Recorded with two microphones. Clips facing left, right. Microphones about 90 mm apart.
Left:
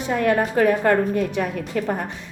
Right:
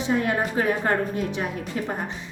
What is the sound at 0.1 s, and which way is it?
A woman's voice, 60° left (ahead or behind).